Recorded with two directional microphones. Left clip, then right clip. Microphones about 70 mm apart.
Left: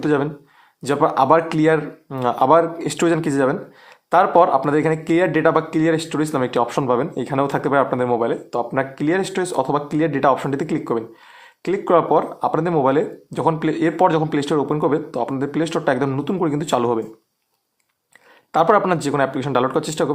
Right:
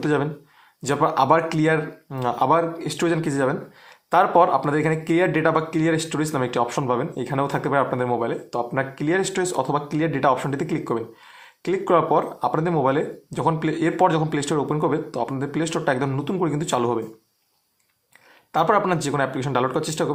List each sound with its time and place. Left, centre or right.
0.0 s speech: left
2.0 s speech: left
2.7 s speech: left
3.2 s speech: left
18.5 s speech: left